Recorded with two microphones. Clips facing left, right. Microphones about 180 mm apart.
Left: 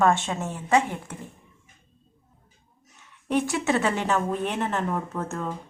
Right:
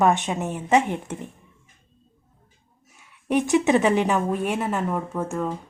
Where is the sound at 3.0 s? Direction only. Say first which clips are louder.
Right 2 dB; 15° right (ahead or behind).